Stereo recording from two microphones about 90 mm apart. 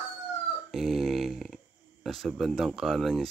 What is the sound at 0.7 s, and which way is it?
Speech, centre (ahead or behind).